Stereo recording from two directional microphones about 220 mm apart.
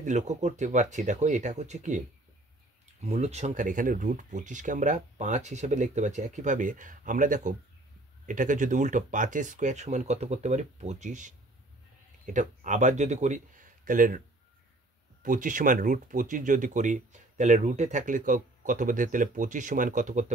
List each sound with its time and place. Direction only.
0.0 s speech: 35° right (ahead or behind)
3.0 s speech: 30° right (ahead or behind)
15.2 s speech: 35° right (ahead or behind)